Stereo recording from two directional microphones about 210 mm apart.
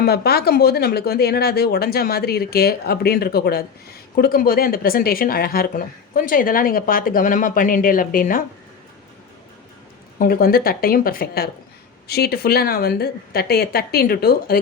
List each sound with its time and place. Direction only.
0.0 s speech: 50° left (ahead or behind)
10.2 s speech: 45° left (ahead or behind)